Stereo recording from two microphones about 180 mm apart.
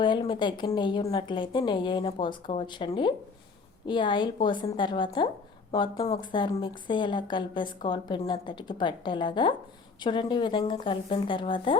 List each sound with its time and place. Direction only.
0.0 s speech: 25° left (ahead or behind)